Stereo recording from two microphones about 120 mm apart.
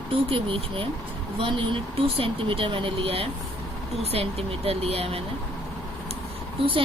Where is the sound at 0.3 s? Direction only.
50° right (ahead or behind).